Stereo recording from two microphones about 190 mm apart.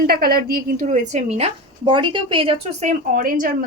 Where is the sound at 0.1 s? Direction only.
50° right (ahead or behind); by 2.9 s 30° right (ahead or behind).